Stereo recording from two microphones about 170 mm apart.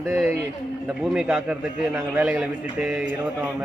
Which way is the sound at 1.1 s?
5° right (ahead or behind).